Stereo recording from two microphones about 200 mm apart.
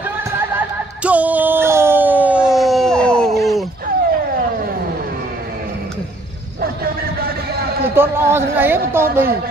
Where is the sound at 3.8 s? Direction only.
45° right (ahead or behind).